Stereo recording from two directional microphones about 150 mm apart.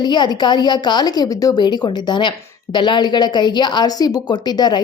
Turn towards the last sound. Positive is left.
turn(degrees=30)  # may be behind; listen again after turning